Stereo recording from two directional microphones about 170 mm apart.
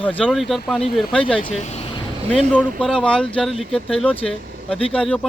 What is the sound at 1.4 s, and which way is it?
Speech, 35° left (ahead or behind).